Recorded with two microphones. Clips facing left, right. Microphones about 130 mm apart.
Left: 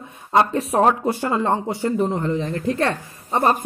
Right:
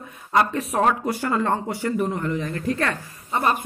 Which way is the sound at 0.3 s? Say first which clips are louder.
Left 3 dB; 30° left (ahead or behind).